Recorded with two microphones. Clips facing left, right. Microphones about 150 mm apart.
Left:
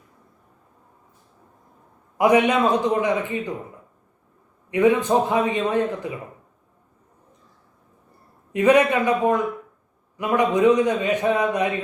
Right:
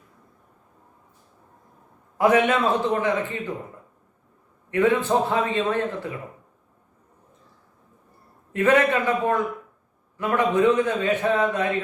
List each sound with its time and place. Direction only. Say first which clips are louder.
2.1 s a man's voice: left 2 dB; 15° left (ahead or behind)
4.7 s a man's voice: left 2 dB; 15° left (ahead or behind)
8.5 s a man's voice: left 3 dB; 15° left (ahead or behind)